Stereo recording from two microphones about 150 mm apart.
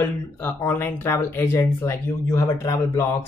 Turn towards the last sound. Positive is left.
turn(degrees=20)  # may be behind; listen again after turning